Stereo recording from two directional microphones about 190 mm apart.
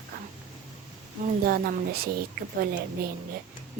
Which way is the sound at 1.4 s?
50° right (ahead or behind).